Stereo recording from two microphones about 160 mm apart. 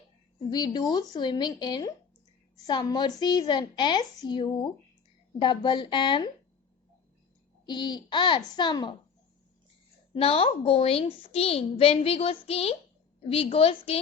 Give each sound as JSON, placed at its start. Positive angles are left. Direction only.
{"t": 0.3, "sound": "a woman's voice", "side_deg": 30}
{"t": 7.6, "sound": "a woman's voice", "side_deg": 30}
{"t": 10.2, "sound": "a woman's voice", "side_deg": 35}